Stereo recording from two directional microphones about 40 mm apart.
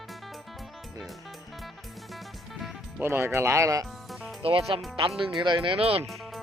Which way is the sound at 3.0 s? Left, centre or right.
Right.